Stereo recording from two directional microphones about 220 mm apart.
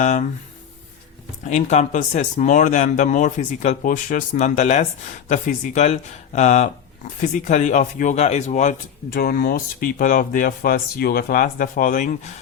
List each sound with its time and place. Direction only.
0.0 s speech: 35° left (ahead or behind)
1.5 s speech: 30° left (ahead or behind)